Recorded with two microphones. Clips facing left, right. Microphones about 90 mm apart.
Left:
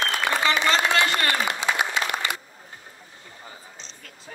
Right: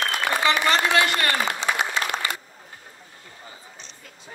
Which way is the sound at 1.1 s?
15° left (ahead or behind).